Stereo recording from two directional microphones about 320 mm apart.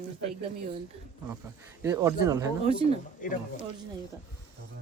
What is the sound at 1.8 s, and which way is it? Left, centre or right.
Speech, centre.